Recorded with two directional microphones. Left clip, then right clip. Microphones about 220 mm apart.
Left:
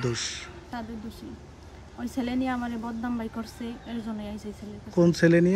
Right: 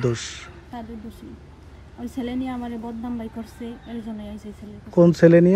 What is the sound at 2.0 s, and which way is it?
Speech, centre (ahead or behind).